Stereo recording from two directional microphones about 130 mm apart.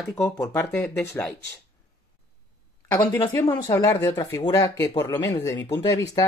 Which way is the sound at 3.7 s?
25° left (ahead or behind).